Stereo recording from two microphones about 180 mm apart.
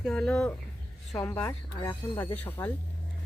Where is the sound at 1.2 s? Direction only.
15° left (ahead or behind).